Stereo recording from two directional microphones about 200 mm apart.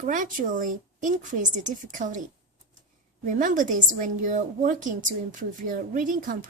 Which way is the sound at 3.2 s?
40° right (ahead or behind).